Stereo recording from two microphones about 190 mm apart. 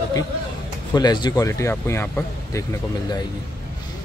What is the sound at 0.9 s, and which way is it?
Speech, 20° left (ahead or behind).